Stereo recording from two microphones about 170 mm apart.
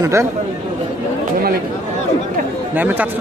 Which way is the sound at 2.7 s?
10° right (ahead or behind).